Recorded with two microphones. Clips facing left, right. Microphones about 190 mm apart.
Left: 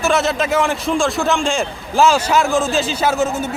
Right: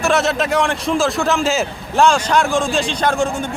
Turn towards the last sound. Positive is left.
turn(degrees=5)  # may be behind; listen again after turning